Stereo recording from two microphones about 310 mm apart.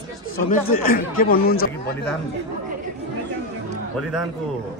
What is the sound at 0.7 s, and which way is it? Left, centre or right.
Speech, left.